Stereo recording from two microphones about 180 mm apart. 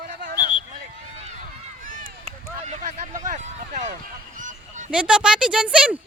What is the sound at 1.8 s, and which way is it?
Run, 50° right (ahead or behind).